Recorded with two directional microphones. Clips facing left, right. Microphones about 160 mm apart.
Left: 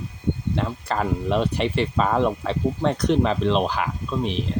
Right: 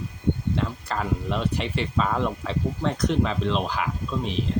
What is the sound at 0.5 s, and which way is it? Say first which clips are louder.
Speech: left 2 dB; 60° left (ahead or behind).